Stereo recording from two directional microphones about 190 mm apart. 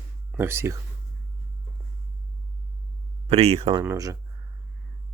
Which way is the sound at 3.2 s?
35° right (ahead or behind).